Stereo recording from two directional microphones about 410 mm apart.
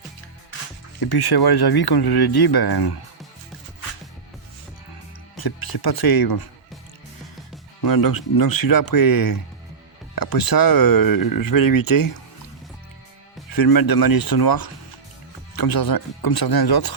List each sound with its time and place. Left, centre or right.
0.9 s speech: left
5.4 s speech: left
7.8 s speech: left
13.6 s speech: left